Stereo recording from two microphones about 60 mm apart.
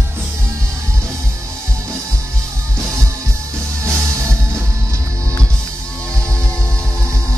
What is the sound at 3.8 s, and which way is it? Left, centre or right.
Music, right.